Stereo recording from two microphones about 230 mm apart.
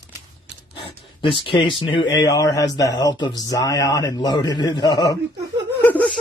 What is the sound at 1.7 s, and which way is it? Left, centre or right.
Speech, left.